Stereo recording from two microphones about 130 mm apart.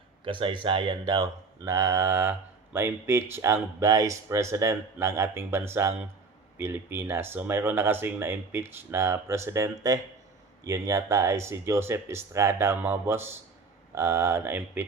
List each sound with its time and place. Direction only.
0.3 s speech: 40° right (ahead or behind)
1.6 s speech: 25° right (ahead or behind)